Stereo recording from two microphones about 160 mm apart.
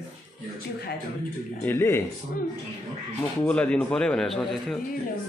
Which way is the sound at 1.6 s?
15° left (ahead or behind).